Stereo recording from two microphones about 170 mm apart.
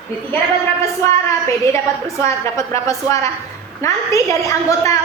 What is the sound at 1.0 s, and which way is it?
A woman's voice, 20° left (ahead or behind).